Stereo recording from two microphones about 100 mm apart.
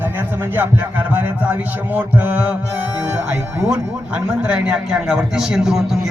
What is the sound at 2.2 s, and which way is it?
Speech, 15° right (ahead or behind).